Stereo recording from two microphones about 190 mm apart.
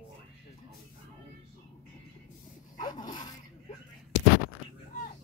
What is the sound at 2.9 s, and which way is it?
Dog, 25° left (ahead or behind).